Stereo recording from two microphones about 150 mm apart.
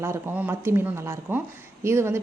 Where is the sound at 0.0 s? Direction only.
15° right (ahead or behind).